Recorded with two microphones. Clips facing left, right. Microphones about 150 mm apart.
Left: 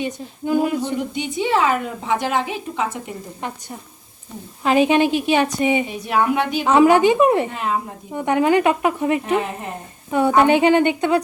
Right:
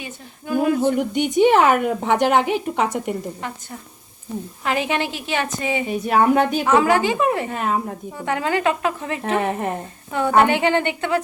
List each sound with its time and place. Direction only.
0.0 s speech: 20° left (ahead or behind)
0.8 s a woman's voice: 55° right (ahead or behind)
3.4 s speech: 20° left (ahead or behind)
4.6 s a woman's voice: 20° left (ahead or behind)
5.9 s speech: 45° right (ahead or behind)
6.7 s speech: 20° left (ahead or behind)
9.4 s a woman's voice: 55° right (ahead or behind)
10.1 s a woman's voice: 15° left (ahead or behind)